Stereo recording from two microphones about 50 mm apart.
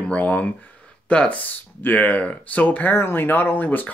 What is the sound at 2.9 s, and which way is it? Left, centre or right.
Speech, left.